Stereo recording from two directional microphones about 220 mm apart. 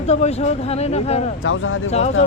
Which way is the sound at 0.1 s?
30° left (ahead or behind).